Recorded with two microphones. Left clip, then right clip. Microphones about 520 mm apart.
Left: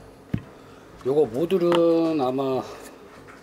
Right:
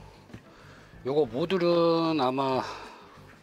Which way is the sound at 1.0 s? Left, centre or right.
Right.